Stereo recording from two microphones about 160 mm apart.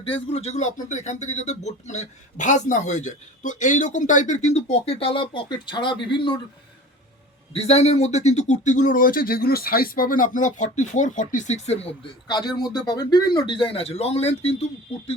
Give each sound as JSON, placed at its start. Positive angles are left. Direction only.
{"t": 0.0, "sound": "speech", "side_deg": 40}
{"t": 7.5, "sound": "speech", "side_deg": 40}
{"t": 12.3, "sound": "speech", "side_deg": 25}